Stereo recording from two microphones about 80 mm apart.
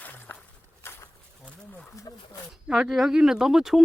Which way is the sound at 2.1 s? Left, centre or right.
Left.